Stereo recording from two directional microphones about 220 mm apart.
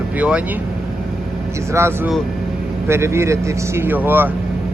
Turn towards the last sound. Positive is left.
turn(degrees=-10)  # may be behind; listen again after turning